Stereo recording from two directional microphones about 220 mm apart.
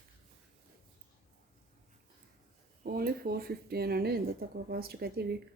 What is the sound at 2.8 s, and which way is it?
A woman's voice, 45° right (ahead or behind).